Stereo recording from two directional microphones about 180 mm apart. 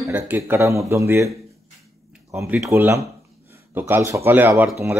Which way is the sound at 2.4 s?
15° right (ahead or behind).